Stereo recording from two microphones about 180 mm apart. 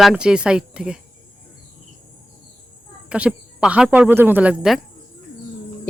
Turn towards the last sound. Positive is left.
turn(degrees=-5)  # may be behind; listen again after turning